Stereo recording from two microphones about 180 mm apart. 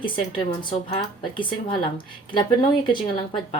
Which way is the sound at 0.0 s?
25° left (ahead or behind).